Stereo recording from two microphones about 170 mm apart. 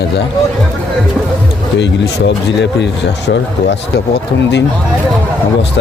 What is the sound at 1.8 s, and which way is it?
Speech, 90° left.